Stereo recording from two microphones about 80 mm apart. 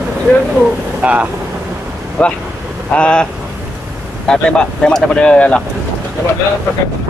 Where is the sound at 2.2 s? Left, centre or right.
Centre.